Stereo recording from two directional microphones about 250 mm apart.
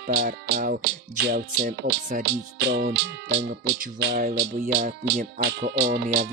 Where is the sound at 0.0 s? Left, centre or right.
Right.